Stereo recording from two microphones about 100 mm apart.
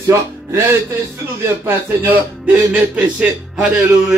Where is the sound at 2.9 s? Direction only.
10° right (ahead or behind).